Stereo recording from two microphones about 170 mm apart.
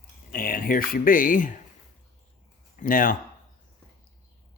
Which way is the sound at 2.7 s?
55° left (ahead or behind).